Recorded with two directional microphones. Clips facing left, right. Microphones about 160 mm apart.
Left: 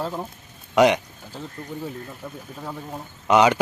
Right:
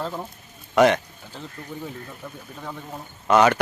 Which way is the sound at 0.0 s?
10° left (ahead or behind).